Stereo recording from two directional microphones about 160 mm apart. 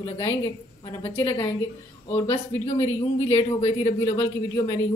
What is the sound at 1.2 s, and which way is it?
A woman's voice, 35° left (ahead or behind).